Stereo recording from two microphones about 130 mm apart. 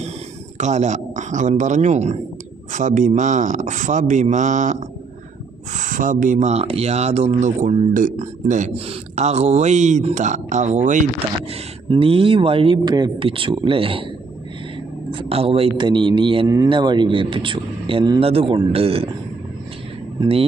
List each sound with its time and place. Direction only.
0.6 s speech: 65° right (ahead or behind)
2.7 s speech: 75° right (ahead or behind)
5.7 s speech: 85° right; by 7.8 s 65° right (ahead or behind)
7.9 s speech: 85° right
8.7 s speech: 55° right (ahead or behind)
11.9 s speech: 45° right (ahead or behind)
15.1 s speech: 50° right (ahead or behind)